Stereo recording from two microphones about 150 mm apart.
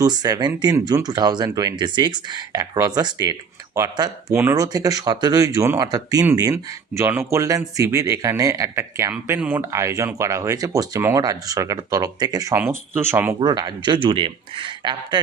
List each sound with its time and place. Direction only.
0.0 s speech: 25° right (ahead or behind)
13.4 s speech: 30° right (ahead or behind)